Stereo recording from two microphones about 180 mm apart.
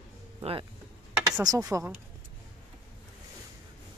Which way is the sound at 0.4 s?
30° right (ahead or behind).